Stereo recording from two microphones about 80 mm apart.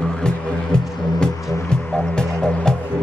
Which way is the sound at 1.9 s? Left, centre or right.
Centre.